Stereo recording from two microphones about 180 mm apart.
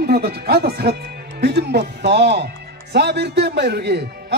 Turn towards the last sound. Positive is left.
turn(degrees=-65)  # may be behind; listen again after turning